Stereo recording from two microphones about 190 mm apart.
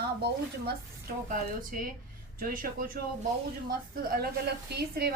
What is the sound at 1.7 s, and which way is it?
A woman's voice, 50° right (ahead or behind).